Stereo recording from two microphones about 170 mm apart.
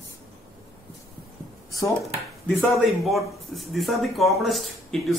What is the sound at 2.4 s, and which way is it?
A man's voice, centre (ahead or behind).